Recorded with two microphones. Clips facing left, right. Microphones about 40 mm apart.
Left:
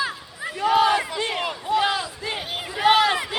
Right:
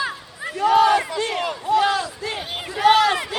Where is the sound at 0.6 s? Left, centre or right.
Centre.